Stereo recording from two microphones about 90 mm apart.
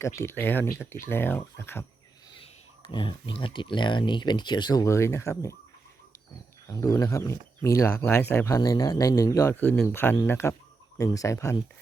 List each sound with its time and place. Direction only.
0.0 s speech: 30° left (ahead or behind)
2.3 s speech: 75° left (ahead or behind); by 5.5 s 35° left (ahead or behind)
6.7 s speech: 40° left (ahead or behind)
7.9 s speech: 15° left (ahead or behind)
8.1 s speech: 25° left (ahead or behind)
8.5 s speech: 45° left (ahead or behind)
10.9 s speech: 40° left (ahead or behind)